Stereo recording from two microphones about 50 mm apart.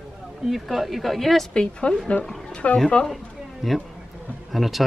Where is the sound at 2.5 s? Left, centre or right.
Left.